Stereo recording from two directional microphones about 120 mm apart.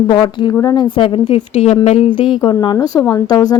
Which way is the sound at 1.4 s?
65° left (ahead or behind).